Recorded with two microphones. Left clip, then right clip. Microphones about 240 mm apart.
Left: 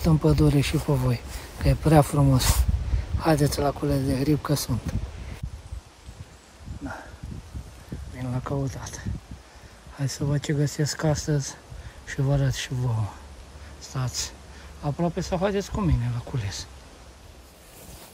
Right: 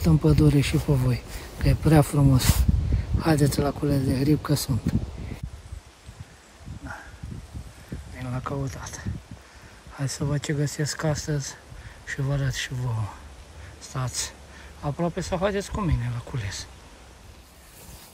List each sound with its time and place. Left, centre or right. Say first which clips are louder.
0.0 s speech: even; centre
8.2 s speech: left 1 dB; centre